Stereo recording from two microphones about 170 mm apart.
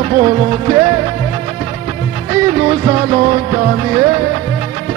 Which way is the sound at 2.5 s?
35° right (ahead or behind).